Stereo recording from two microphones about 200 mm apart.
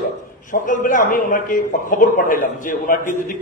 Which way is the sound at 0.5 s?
40° left (ahead or behind).